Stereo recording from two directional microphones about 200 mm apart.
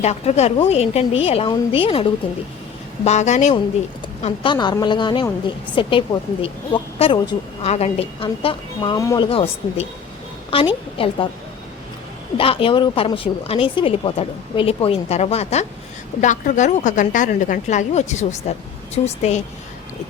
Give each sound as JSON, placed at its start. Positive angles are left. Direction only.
{"t": 0.0, "sound": "a woman's voice", "side_deg": 30}
{"t": 4.5, "sound": "speech", "side_deg": 20}
{"t": 10.9, "sound": "speech", "side_deg": 25}
{"t": 12.4, "sound": "a woman's voice", "side_deg": 25}